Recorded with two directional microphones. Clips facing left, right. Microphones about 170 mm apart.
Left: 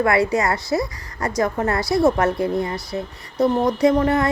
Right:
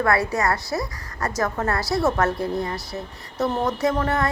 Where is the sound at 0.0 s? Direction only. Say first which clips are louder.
Left 3 dB; 20° left (ahead or behind).